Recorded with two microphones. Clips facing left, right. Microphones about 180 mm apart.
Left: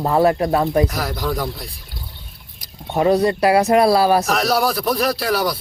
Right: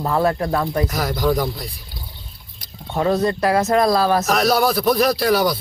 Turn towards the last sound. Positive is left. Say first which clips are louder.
# right 2 dB
turn(degrees=5)  # may be behind; listen again after turning